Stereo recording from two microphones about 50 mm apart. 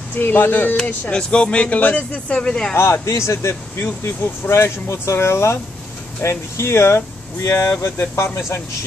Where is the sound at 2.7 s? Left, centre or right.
Left.